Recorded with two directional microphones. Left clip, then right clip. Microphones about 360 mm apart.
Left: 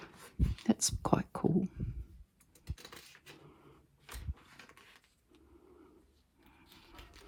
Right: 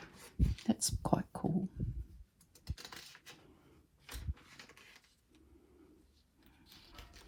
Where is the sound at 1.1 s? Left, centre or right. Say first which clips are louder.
Left 2 dB; right.